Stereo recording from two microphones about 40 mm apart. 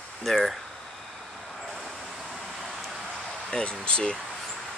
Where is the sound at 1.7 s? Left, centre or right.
Centre.